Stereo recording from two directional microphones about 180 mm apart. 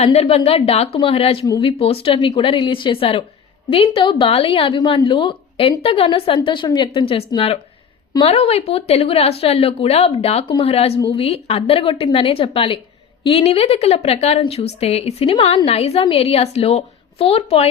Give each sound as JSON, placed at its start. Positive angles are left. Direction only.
{"t": 0.0, "sound": "a woman's voice", "side_deg": 35}